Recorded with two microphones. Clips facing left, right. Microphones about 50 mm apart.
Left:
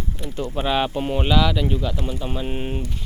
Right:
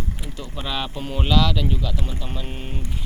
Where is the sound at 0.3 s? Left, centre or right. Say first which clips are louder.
Left 8 dB; left.